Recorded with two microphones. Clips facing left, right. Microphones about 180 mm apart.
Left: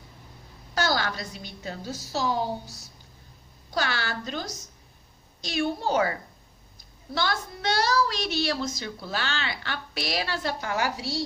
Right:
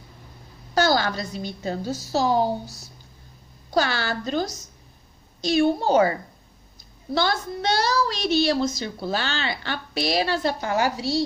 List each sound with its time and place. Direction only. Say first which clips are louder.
0.7 s a woman's voice: right 6 dB; 30° right (ahead or behind)
3.7 s a woman's voice: right 6 dB; 35° right (ahead or behind)
7.2 s a woman's voice: right 5 dB; 30° right (ahead or behind)